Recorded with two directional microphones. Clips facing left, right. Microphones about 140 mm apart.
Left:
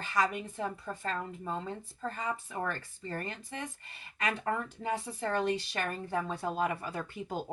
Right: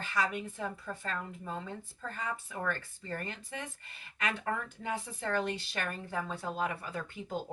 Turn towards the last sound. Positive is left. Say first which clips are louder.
# left 2 dB
turn(degrees=35)  # may be behind; listen again after turning